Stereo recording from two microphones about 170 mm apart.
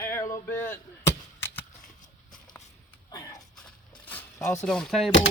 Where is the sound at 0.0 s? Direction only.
15° left (ahead or behind).